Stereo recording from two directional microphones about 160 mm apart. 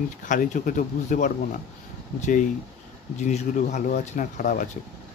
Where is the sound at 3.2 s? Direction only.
50° left (ahead or behind).